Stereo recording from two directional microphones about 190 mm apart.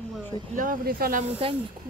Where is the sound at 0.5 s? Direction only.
45° right (ahead or behind).